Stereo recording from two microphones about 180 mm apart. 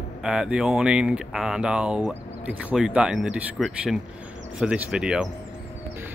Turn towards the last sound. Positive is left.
turn(degrees=-5)  # may be behind; listen again after turning